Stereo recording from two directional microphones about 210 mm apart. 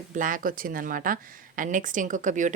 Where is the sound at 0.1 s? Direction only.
40° right (ahead or behind).